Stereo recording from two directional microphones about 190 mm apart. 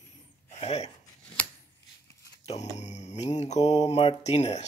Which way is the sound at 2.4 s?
35° left (ahead or behind).